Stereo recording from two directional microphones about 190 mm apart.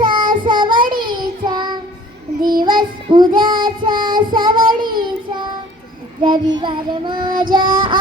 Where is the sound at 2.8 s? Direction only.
25° right (ahead or behind).